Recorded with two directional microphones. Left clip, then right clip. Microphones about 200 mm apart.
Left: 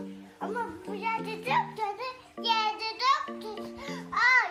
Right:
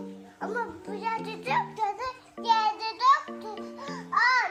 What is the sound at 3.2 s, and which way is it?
Music, centre (ahead or behind).